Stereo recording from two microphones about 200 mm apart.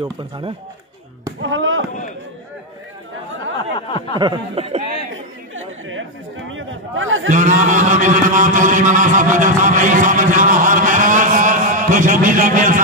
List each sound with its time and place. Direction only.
1.4 s speech: 70° right (ahead or behind)
3.7 s a sound: 25° left (ahead or behind)
4.2 s speech: 25° right (ahead or behind)
5.1 s chatter: 80° right
6.5 s a sound: 75° right (ahead or behind)
7.2 s speech: 40° right (ahead or behind)